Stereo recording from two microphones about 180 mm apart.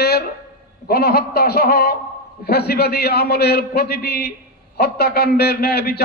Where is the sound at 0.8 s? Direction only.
60° left (ahead or behind).